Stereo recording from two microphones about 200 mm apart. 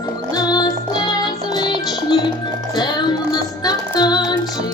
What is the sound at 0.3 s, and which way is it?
Music, 20° left (ahead or behind).